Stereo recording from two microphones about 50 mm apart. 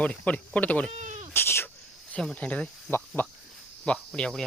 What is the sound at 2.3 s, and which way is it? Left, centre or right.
Speech, left.